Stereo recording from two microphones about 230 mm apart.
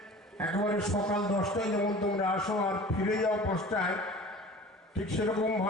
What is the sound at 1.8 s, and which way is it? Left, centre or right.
Speech, centre.